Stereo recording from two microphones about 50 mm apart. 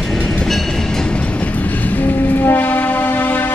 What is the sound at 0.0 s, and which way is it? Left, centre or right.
Train, centre.